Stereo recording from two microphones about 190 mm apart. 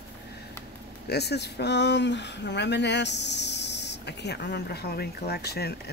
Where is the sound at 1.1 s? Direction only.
60° left (ahead or behind).